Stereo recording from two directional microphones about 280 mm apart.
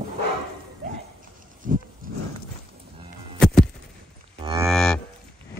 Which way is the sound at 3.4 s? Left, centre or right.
Centre.